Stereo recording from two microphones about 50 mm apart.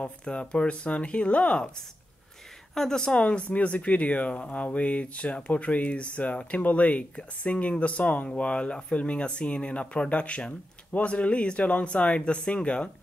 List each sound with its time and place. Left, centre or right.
0.0 s speech: left
2.7 s speech: centre
3.2 s speech: left